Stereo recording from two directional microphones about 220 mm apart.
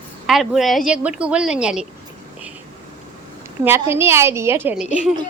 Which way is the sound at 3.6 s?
10° right (ahead or behind).